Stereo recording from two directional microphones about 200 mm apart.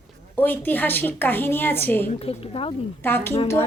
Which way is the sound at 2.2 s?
30° left (ahead or behind).